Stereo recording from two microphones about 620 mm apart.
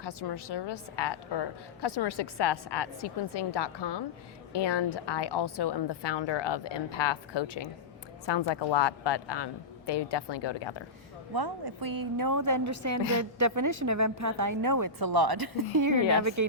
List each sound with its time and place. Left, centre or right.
0.0 s a woman's voice: left
11.3 s a woman's voice: right